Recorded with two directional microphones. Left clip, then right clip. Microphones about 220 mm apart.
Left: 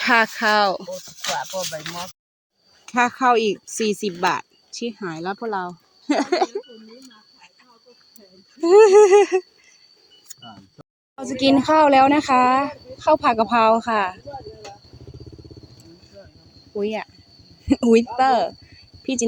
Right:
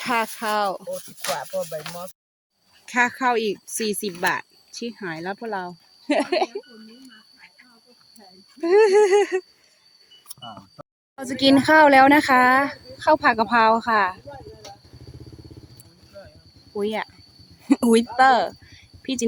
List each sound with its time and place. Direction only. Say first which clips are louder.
0.0 s a sound: left 7 dB; 20° left (ahead or behind)
1.3 s speech: left 1 dB; centre (ahead or behind)
2.8 s speech: left 3 dB; 5° left (ahead or behind)
8.6 s a sound: left 5 dB; 10° left (ahead or behind)
11.2 s speech: even; 5° right (ahead or behind)
16.7 s speech: left 1 dB; 5° right (ahead or behind)